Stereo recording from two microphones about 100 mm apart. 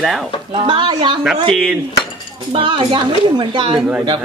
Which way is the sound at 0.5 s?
55° right (ahead or behind).